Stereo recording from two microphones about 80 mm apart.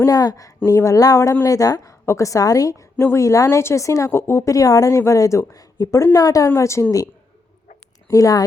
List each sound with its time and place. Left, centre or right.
0.1 s a woman's voice: left
6.5 s speech: left
8.1 s a woman's voice: left